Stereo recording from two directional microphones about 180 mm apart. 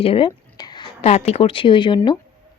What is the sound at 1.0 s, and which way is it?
Speech, 35° left (ahead or behind).